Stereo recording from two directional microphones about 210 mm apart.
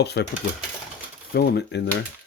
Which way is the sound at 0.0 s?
50° left (ahead or behind).